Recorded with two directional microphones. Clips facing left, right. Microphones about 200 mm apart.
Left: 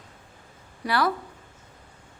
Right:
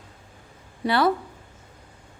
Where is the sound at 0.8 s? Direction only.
25° right (ahead or behind).